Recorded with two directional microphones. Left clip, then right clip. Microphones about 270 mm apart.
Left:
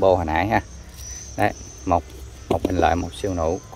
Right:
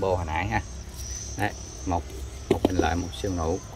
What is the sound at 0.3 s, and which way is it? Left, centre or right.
Speech, centre.